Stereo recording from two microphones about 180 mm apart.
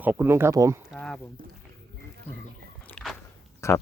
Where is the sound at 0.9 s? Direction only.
5° left (ahead or behind).